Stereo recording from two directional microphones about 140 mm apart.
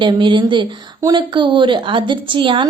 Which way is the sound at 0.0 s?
35° right (ahead or behind).